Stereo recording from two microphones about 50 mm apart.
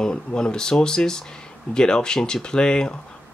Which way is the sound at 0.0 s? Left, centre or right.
Centre.